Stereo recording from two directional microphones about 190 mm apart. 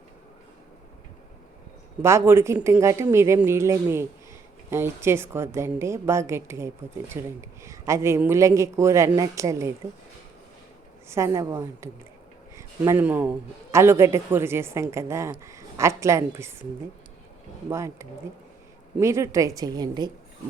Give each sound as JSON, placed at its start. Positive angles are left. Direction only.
{"t": 2.0, "sound": "a man's voice", "side_deg": -15}
{"t": 11.1, "sound": "a man's voice", "side_deg": -15}
{"t": 17.7, "sound": "a man's voice", "side_deg": -15}